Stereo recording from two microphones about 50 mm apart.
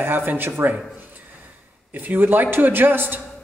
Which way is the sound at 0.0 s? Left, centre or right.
Right.